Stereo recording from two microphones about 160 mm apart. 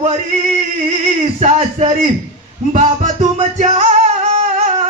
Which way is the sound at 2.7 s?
45° right (ahead or behind).